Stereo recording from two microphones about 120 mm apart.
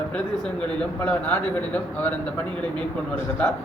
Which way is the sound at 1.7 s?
15° left (ahead or behind).